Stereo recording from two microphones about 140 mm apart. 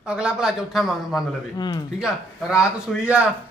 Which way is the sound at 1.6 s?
30° left (ahead or behind).